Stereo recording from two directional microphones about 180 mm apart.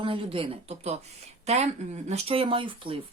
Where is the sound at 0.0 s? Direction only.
30° right (ahead or behind).